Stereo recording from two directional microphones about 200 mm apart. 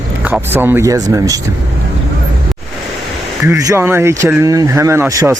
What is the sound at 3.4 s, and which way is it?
Speech, 15° right (ahead or behind).